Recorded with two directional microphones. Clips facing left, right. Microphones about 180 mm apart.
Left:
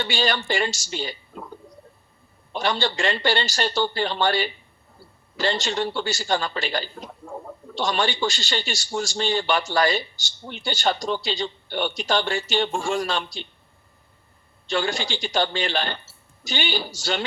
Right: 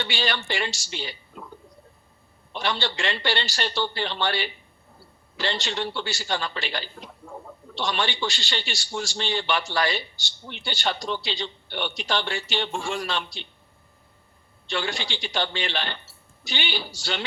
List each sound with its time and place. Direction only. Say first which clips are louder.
0.0 s a man's voice: left 4 dB; 45° left (ahead or behind)
2.5 s a man's voice: left 4 dB; 45° left (ahead or behind)
14.7 s a man's voice: left 4 dB; 45° left (ahead or behind)